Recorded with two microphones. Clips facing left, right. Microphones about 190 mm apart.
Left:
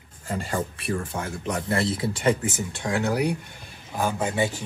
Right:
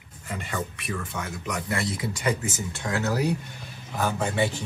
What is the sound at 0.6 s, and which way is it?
Speech, 25° left (ahead or behind).